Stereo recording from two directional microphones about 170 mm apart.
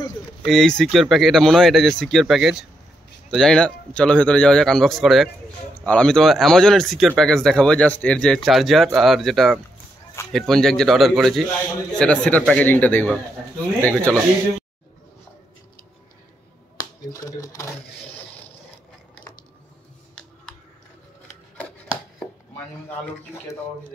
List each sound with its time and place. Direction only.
0.5 s speech: 5° left (ahead or behind)
17.1 s speech: 20° left (ahead or behind)